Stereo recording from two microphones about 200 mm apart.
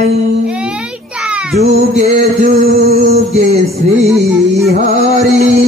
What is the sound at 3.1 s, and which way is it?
Speech, 30° right (ahead or behind).